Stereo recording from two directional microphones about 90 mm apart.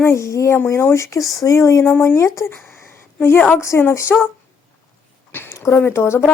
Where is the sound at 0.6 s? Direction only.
25° left (ahead or behind).